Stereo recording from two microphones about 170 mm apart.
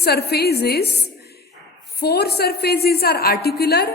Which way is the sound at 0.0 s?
70° left (ahead or behind).